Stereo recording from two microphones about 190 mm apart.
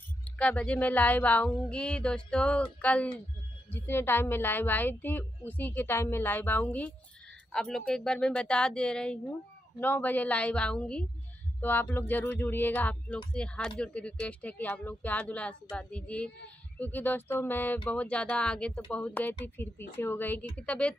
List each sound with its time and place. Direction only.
0.4 s a woman's voice: 5° left (ahead or behind)